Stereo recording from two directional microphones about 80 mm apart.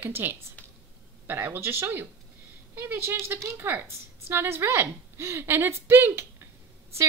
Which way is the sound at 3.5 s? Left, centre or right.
Right.